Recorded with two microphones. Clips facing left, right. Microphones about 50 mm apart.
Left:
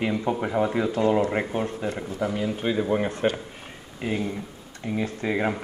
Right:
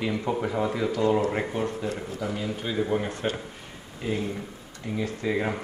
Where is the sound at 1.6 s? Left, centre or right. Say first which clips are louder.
Left 1 dB; left.